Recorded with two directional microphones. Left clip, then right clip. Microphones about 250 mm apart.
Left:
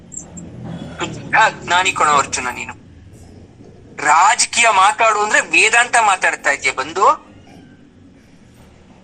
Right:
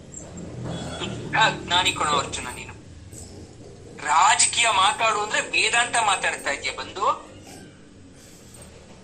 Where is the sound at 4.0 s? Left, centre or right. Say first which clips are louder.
Left 6 dB; left.